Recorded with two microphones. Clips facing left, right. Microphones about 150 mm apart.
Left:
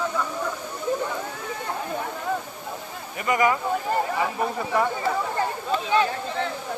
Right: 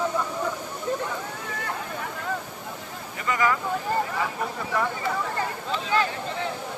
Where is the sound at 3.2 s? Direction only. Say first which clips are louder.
Left 3 dB; 20° left (ahead or behind).